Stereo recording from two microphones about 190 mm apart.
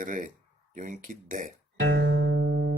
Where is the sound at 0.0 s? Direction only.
45° right (ahead or behind).